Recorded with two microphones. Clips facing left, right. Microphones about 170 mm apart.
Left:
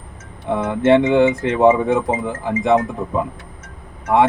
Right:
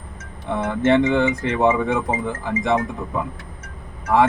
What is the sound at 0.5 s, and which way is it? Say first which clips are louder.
Speech: left 3 dB; 20° left (ahead or behind).